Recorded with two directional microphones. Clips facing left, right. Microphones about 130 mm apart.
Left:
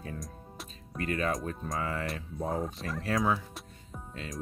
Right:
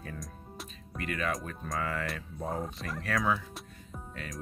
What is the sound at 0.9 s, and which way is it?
Speech, 30° left (ahead or behind).